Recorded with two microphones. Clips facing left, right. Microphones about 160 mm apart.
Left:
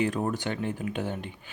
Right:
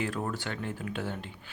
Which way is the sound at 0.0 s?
20° left (ahead or behind).